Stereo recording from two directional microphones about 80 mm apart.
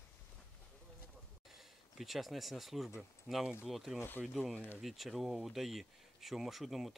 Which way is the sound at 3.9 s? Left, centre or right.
Left.